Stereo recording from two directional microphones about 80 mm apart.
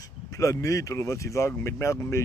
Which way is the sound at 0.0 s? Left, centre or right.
Left.